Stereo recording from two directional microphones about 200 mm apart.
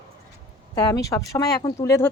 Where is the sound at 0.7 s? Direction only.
15° left (ahead or behind).